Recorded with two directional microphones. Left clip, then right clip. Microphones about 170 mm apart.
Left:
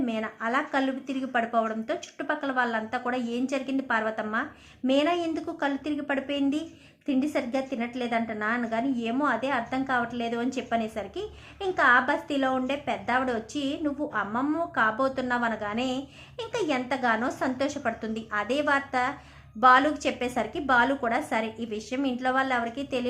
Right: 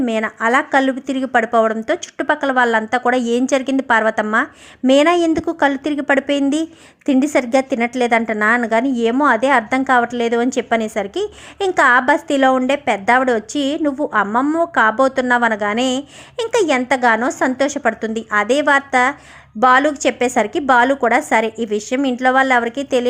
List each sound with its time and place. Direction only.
0.0 s a woman's voice: 50° right (ahead or behind)